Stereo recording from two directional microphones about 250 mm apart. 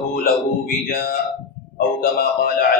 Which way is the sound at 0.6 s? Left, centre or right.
Left.